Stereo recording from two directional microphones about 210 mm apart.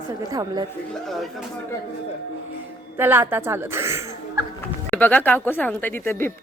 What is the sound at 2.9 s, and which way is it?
A woman's voice, 10° right (ahead or behind).